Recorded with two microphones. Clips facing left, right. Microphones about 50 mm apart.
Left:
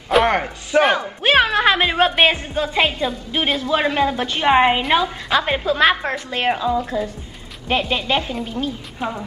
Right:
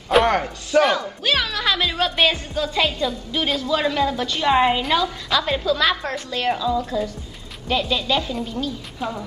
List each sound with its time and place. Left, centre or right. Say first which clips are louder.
0.3 s speech: left 1 dB; left
1.2 s a woman's voice: left 9 dB; left
7.9 s a woman's voice: left 1 dB; left